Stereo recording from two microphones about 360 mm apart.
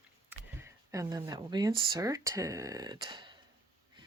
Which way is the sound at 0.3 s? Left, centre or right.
Centre.